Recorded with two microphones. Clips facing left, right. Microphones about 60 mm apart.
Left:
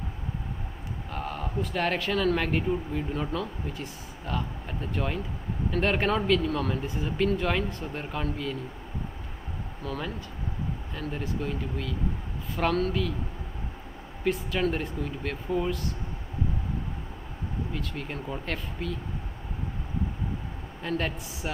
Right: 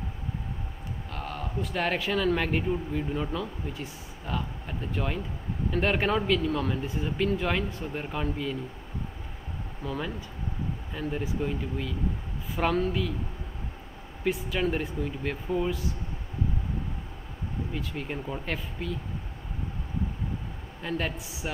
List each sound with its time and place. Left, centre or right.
1.1 s a man's voice: centre
9.8 s speech: centre
14.2 s a man's voice: centre
17.7 s speech: centre
20.8 s a man's voice: centre